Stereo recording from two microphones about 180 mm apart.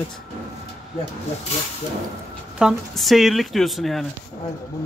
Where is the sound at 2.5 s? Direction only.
Centre (ahead or behind).